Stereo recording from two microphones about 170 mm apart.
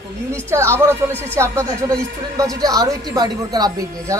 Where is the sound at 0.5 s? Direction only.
15° right (ahead or behind).